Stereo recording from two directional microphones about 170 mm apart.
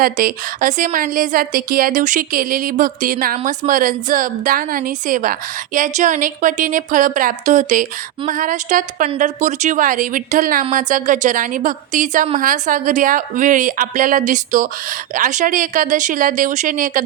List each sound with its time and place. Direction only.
0.0 s speech: 55° right (ahead or behind)